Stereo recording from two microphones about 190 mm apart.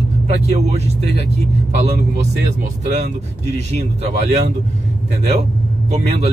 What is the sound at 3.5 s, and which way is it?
Speech, 35° right (ahead or behind).